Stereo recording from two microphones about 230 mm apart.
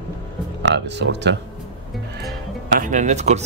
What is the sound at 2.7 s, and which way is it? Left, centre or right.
Speech, right.